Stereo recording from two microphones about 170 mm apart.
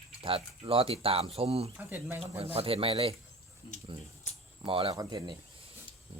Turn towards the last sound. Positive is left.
turn(degrees=-25)  # may be behind; listen again after turning